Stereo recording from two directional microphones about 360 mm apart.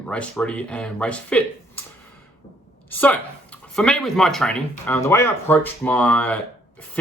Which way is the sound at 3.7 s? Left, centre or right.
Centre.